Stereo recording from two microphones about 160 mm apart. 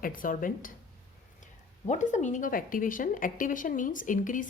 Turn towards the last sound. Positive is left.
turn(degrees=55)  # may be behind; listen again after turning